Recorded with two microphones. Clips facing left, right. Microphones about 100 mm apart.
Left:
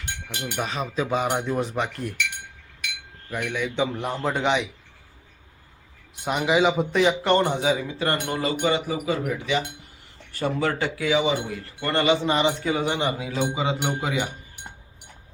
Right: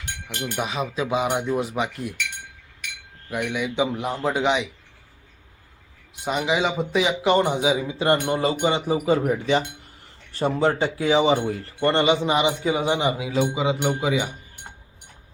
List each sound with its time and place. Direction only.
0.0 s a sound: 20° left (ahead or behind)
0.5 s speech: 5° right (ahead or behind)
3.2 s speech: 10° right (ahead or behind)
6.2 s speech: centre (ahead or behind)